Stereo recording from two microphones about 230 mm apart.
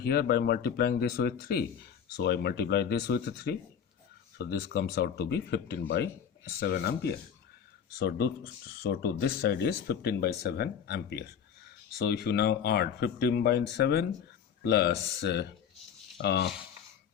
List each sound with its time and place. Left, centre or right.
0.0 s speech: left